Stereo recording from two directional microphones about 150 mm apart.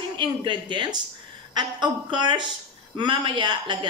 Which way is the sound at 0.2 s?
30° right (ahead or behind).